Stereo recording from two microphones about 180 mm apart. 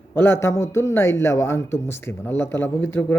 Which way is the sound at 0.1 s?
15° left (ahead or behind).